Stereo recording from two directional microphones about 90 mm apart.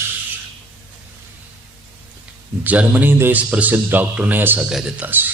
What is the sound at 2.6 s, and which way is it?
Speech, 20° right (ahead or behind).